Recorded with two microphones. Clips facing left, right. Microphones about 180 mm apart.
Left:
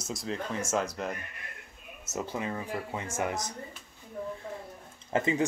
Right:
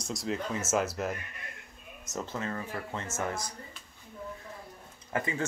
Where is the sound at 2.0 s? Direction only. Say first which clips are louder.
Left 2 dB; 10° left (ahead or behind).